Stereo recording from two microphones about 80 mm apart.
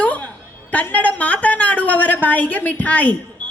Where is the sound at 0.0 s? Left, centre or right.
Centre.